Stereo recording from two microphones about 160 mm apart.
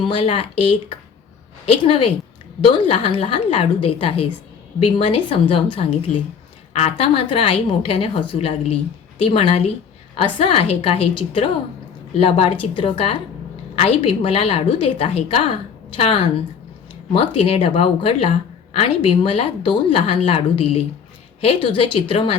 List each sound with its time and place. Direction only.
0.1 s a woman's voice: 35° left (ahead or behind)